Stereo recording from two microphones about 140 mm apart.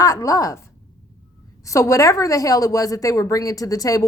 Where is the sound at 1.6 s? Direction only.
20° left (ahead or behind).